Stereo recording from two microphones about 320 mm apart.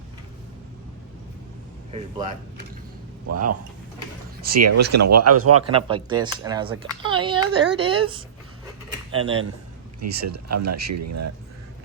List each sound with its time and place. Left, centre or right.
1.9 s a man's voice: centre
3.2 s a man's voice: right
5.7 s speech: centre
10.0 s a man's voice: right